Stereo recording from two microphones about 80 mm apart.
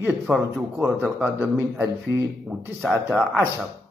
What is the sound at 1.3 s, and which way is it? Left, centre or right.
Speech, right.